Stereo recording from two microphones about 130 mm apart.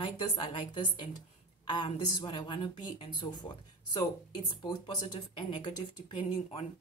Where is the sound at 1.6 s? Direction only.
40° left (ahead or behind).